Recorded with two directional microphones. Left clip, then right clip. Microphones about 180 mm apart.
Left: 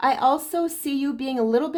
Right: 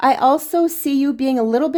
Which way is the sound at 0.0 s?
40° right (ahead or behind).